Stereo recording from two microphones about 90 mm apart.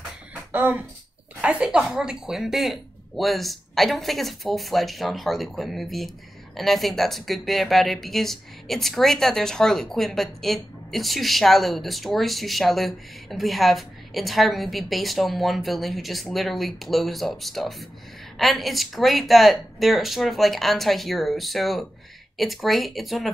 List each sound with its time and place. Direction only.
0.5 s speech: 20° right (ahead or behind); by 23.3 s centre (ahead or behind)